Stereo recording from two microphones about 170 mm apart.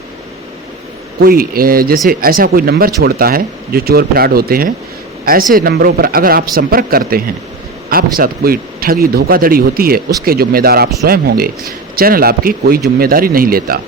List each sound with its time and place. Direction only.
1.2 s a man's voice: 60° right (ahead or behind)